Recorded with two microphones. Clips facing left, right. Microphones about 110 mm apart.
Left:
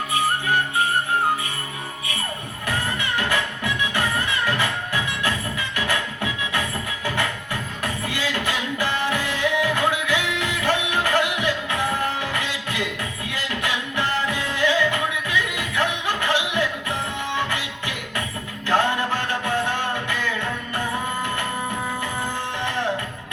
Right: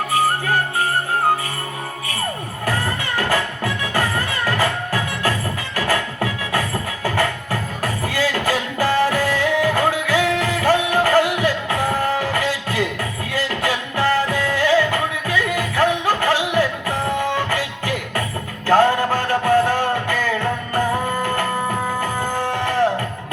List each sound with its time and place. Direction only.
0.1 s music: 40° right (ahead or behind)
2.6 s music: 40° right (ahead or behind)